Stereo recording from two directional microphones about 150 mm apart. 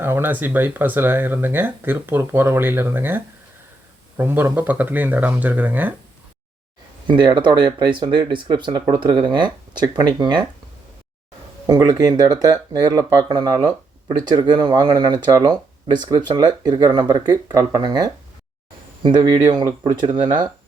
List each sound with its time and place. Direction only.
0.0 s speech: 15° right (ahead or behind)
7.1 s speech: 30° right (ahead or behind)
11.6 s speech: 25° right (ahead or behind)
19.5 s speech: 35° right (ahead or behind)